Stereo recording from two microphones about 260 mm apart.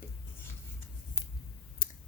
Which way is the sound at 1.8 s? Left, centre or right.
Left.